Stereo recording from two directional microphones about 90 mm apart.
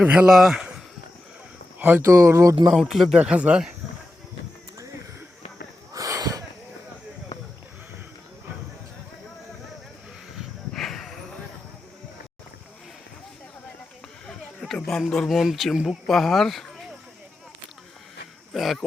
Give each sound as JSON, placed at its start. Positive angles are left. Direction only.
{"t": 0.0, "sound": "speech", "side_deg": -20}
{"t": 0.3, "sound": "speech", "side_deg": -5}
{"t": 2.0, "sound": "speech", "side_deg": -35}
{"t": 2.7, "sound": "speech", "side_deg": 0}
{"t": 5.9, "sound": "snort", "side_deg": -40}
{"t": 10.3, "sound": "a sound", "side_deg": 5}
{"t": 14.3, "sound": "a sound", "side_deg": 5}
{"t": 15.1, "sound": "speech", "side_deg": 0}
{"t": 18.5, "sound": "speech", "side_deg": 0}